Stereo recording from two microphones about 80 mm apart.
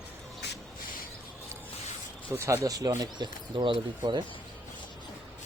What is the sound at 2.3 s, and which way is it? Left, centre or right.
Speech, right.